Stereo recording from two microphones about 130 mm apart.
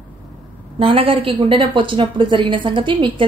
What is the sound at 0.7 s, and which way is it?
A woman's voice, 45° right (ahead or behind).